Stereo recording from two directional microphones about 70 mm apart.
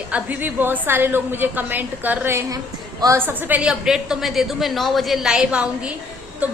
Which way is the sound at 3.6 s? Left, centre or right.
Centre.